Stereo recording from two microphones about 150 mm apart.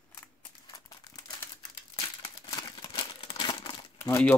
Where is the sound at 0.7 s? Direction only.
25° left (ahead or behind).